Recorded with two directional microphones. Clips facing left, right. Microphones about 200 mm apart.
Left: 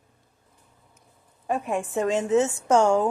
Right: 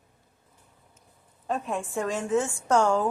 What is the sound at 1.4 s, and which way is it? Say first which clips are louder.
A woman's voice: left 3 dB; 15° left (ahead or behind).